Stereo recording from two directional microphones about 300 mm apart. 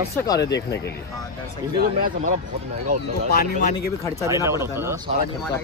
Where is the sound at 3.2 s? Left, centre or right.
Left.